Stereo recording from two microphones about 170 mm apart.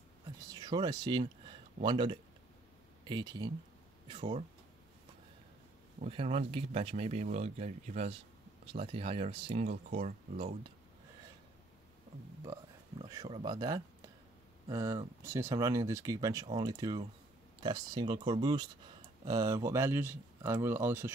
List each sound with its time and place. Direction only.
0.4 s a sound: 20° right (ahead or behind)
3.1 s speech: 25° right (ahead or behind)
5.9 s speech: 40° right (ahead or behind)
13.0 s speech: 25° right (ahead or behind)